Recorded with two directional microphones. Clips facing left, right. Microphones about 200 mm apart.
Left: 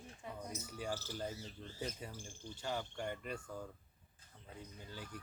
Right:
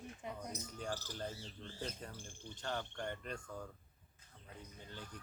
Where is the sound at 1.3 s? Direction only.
30° right (ahead or behind).